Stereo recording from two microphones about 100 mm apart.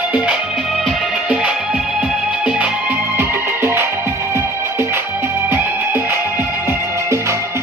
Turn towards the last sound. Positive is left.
turn(degrees=-25)  # may be behind; listen again after turning